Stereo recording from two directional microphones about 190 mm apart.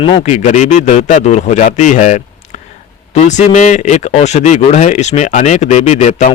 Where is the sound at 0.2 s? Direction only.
40° left (ahead or behind).